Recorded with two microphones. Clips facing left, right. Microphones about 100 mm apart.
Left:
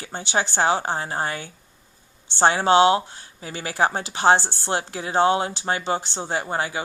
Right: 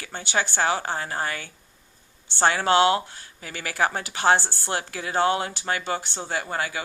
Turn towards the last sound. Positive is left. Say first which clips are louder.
# left 3 dB
turn(degrees=25)  # may be behind; listen again after turning